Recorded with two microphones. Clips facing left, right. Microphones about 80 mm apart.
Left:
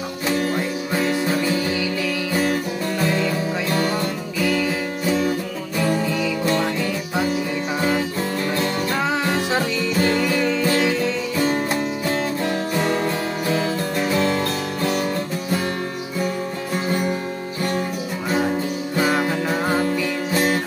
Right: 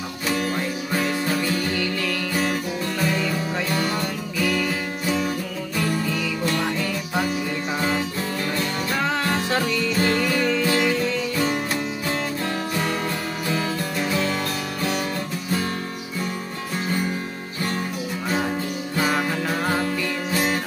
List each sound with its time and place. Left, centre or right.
0.6 s music: centre
3.1 s music: centre
4.4 s music: centre
9.5 s music: centre
11.4 s music: left
13.5 s music: left
18.9 s music: centre